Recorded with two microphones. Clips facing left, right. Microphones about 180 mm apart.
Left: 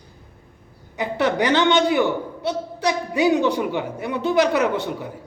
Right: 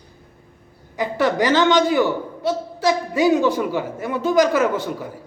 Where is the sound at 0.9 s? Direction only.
20° left (ahead or behind).